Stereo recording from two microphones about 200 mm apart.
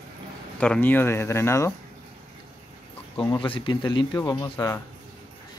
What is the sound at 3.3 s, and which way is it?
Speech, 25° left (ahead or behind).